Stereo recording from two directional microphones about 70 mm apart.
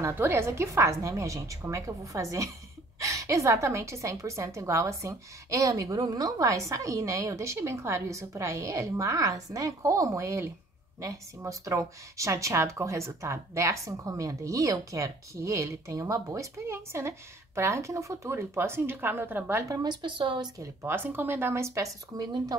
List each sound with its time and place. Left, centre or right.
0.1 s a woman's voice: right
19.7 s a woman's voice: right
20.8 s speech: right
22.1 s a woman's voice: right